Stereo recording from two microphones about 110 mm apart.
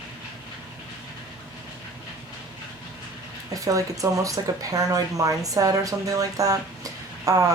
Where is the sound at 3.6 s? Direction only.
30° right (ahead or behind).